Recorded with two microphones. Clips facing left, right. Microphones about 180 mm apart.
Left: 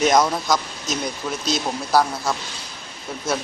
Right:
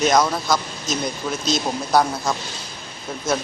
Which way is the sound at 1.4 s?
10° left (ahead or behind).